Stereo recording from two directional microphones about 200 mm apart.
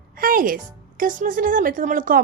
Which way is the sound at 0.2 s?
45° right (ahead or behind).